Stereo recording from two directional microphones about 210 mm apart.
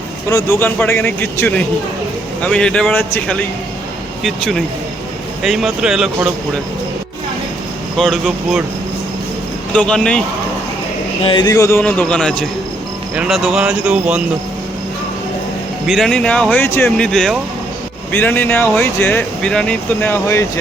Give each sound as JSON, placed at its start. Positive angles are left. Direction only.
{"t": 0.3, "sound": "speech", "side_deg": 15}
{"t": 7.9, "sound": "speech", "side_deg": 0}
{"t": 9.7, "sound": "speech", "side_deg": 5}
{"t": 11.2, "sound": "speech", "side_deg": 25}
{"t": 15.9, "sound": "speech", "side_deg": 0}